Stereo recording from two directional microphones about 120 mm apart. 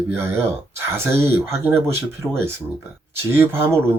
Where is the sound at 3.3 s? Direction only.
20° right (ahead or behind).